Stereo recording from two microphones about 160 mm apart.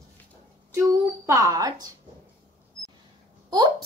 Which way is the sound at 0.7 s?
20° right (ahead or behind).